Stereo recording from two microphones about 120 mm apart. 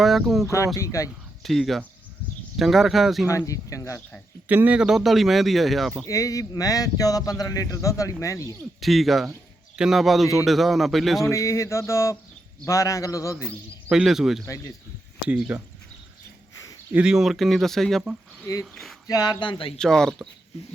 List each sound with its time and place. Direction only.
0.0 s speech: centre (ahead or behind)
0.8 s a man's voice: 25° left (ahead or behind)
1.5 s speech: centre (ahead or behind)
3.2 s a man's voice: 25° left (ahead or behind)
4.4 s speech: 15° right (ahead or behind)
6.1 s a man's voice: 30° left (ahead or behind)
8.8 s speech: centre (ahead or behind)
11.3 s a man's voice: 25° left (ahead or behind)
13.3 s a man's voice: 10° right (ahead or behind)
14.4 s a man's voice: 30° left (ahead or behind)
15.3 s a man's voice: 10° right (ahead or behind)
16.9 s speech: 5° right (ahead or behind)
19.0 s speech: 30° left (ahead or behind)
19.7 s speech: 5° left (ahead or behind)